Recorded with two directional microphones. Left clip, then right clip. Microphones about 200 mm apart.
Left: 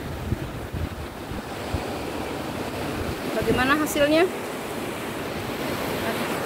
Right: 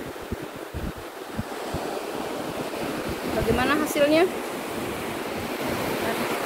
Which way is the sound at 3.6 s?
10° left (ahead or behind).